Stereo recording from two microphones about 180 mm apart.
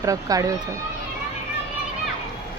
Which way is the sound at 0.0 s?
20° right (ahead or behind).